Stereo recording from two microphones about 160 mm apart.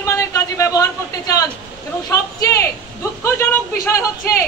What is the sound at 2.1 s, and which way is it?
Speech, 20° left (ahead or behind).